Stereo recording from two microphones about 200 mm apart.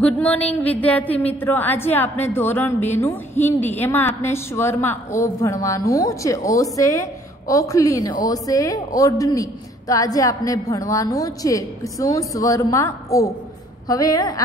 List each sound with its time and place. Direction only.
0.0 s a woman's voice: 5° left (ahead or behind)